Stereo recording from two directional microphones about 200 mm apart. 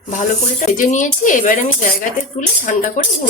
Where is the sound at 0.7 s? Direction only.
40° left (ahead or behind).